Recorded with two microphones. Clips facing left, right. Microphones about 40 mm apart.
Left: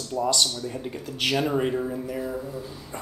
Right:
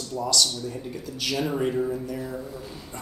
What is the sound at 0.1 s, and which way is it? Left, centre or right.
Speech, left.